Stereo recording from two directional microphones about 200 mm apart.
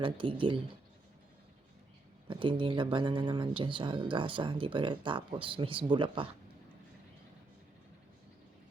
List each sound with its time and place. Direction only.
0.0 s speech: 25° right (ahead or behind)
2.2 s speech: 25° right (ahead or behind)